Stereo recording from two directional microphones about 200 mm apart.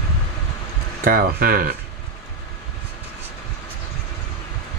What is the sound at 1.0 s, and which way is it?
Speech, 45° right (ahead or behind).